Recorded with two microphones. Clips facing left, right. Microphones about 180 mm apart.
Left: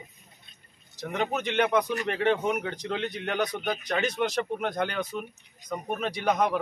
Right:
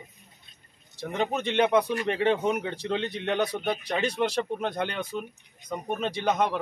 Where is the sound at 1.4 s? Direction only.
30° right (ahead or behind).